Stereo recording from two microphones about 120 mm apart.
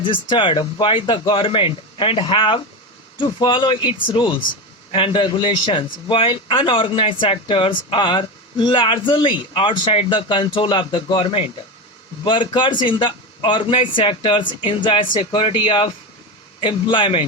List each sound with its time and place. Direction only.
0.0 s a man's voice: 45° left (ahead or behind)